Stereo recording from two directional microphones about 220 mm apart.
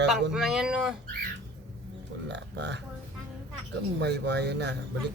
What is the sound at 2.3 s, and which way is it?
Speech, 50° right (ahead or behind).